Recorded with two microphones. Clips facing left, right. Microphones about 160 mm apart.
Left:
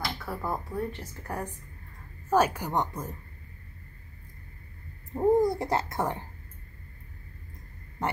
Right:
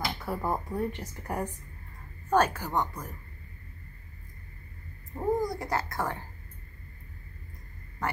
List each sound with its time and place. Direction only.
0.2 s speech: 15° right (ahead or behind)
2.2 s a woman's voice: 10° left (ahead or behind)
5.1 s a child's voice: 25° left (ahead or behind)